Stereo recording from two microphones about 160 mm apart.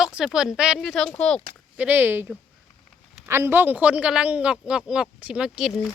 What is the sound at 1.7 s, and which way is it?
A woman's voice, 10° right (ahead or behind).